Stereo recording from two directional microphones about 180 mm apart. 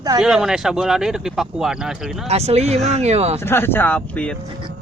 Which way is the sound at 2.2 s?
35° right (ahead or behind).